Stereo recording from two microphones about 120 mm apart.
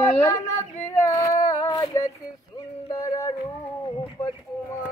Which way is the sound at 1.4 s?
35° left (ahead or behind).